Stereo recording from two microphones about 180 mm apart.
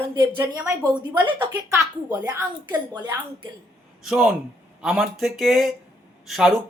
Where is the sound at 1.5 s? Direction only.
15° right (ahead or behind).